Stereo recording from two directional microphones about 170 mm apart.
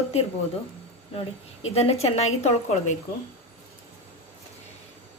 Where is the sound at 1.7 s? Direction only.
35° left (ahead or behind).